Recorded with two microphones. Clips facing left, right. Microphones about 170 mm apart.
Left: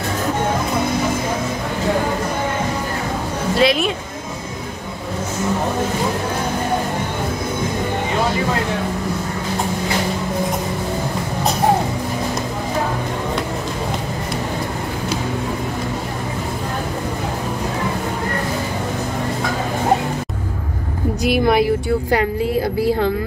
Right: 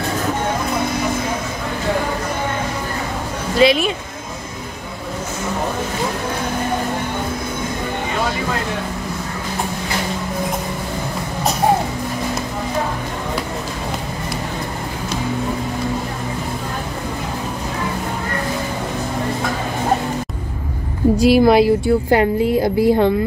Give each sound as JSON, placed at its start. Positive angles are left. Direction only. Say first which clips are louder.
{"t": 3.5, "sound": "a woman's voice", "louder": "right 3 dB", "side_deg": 0}
{"t": 21.2, "sound": "a woman's voice", "louder": "right 4 dB", "side_deg": -30}